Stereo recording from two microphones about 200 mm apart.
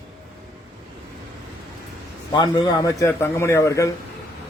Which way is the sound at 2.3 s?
20° left (ahead or behind).